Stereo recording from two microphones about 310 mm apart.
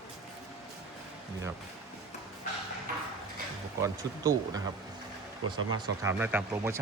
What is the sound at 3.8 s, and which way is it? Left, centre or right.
Speech, centre.